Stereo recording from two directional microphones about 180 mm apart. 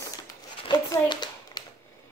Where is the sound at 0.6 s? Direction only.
25° left (ahead or behind).